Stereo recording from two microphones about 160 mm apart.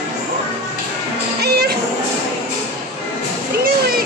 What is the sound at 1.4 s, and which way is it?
Music, 85° right.